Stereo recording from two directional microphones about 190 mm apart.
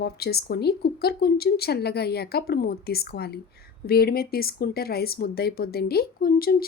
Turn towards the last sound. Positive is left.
turn(degrees=50)  # may be behind; listen again after turning